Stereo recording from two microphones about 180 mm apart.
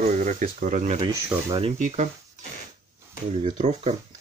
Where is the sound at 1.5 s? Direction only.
35° right (ahead or behind).